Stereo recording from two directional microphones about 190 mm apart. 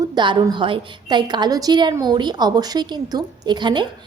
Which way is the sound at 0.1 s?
25° right (ahead or behind).